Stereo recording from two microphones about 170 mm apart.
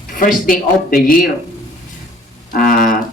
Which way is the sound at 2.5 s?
55° left (ahead or behind).